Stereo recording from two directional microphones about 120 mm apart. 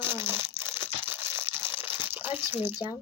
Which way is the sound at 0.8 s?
20° right (ahead or behind).